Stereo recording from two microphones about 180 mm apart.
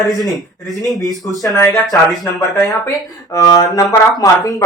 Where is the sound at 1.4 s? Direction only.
15° left (ahead or behind).